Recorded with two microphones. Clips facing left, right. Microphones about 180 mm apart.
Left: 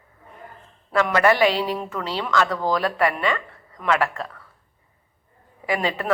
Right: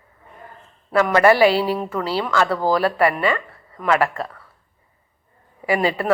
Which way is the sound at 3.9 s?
40° right (ahead or behind).